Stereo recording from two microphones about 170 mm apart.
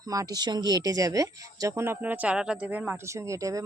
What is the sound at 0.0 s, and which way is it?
Speech, 20° right (ahead or behind).